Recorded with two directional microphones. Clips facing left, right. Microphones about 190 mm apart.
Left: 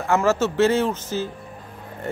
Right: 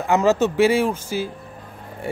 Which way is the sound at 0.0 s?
15° right (ahead or behind).